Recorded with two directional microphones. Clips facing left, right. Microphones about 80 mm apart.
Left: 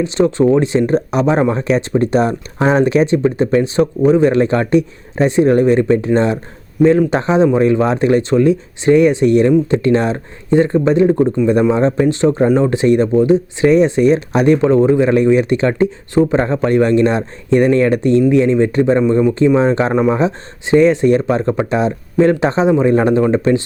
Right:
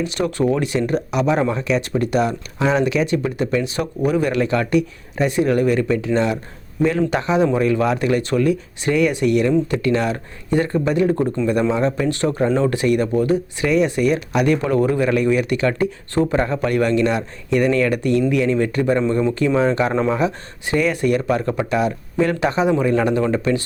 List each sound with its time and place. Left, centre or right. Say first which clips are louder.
0.0 s speech: left 7 dB; left
19.9 s speech: left 5 dB; centre
20.1 s speech: left 4 dB; left